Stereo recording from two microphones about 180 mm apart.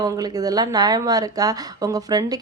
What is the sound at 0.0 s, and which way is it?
A woman's voice, 20° right (ahead or behind).